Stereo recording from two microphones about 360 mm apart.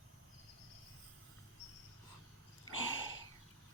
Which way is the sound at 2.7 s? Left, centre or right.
Left.